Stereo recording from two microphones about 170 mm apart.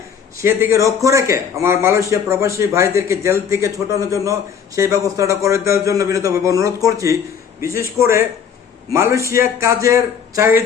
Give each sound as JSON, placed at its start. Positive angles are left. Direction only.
{"t": 0.3, "sound": "a man's voice", "side_deg": -15}